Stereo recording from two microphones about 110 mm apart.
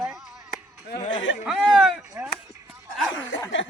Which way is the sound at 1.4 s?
5° right (ahead or behind).